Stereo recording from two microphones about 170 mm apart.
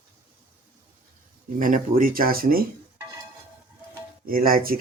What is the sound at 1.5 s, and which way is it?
Speech, 50° right (ahead or behind).